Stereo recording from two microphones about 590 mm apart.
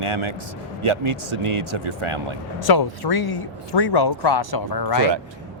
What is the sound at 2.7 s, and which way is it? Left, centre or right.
Speech, left.